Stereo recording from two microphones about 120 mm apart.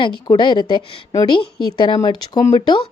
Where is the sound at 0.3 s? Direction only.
40° left (ahead or behind).